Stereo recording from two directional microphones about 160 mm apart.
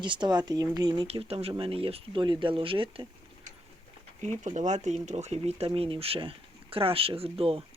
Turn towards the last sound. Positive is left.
turn(degrees=-35)  # may be behind; listen again after turning